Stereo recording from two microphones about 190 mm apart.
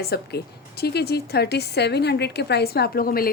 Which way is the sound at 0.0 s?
55° left (ahead or behind).